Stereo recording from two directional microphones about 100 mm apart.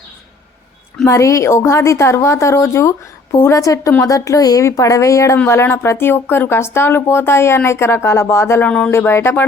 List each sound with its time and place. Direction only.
1.0 s speech: 30° left (ahead or behind)